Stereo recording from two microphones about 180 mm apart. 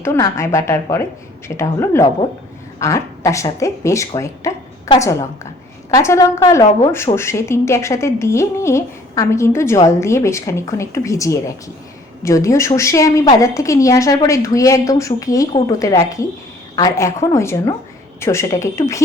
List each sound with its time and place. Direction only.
0.0 s a woman's voice: 15° left (ahead or behind)